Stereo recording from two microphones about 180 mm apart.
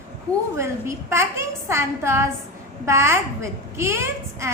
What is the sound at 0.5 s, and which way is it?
A woman's voice, 15° right (ahead or behind).